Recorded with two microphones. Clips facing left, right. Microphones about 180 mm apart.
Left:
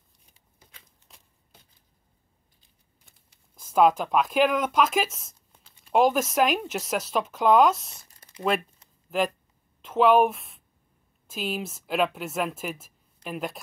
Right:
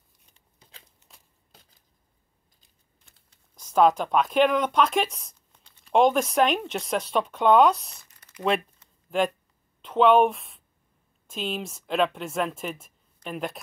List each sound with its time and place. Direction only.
3.1 s speech: 5° left (ahead or behind)
8.0 s a sound: 35° left (ahead or behind)
8.4 s speech: 5° left (ahead or behind)
9.8 s speech: 5° left (ahead or behind)